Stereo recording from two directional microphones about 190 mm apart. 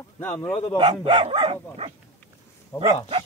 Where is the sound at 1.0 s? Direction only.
25° right (ahead or behind).